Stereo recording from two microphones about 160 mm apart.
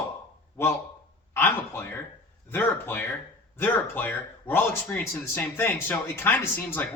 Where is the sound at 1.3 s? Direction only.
15° left (ahead or behind).